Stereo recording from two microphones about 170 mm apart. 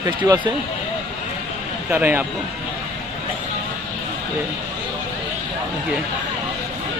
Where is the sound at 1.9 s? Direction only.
10° right (ahead or behind).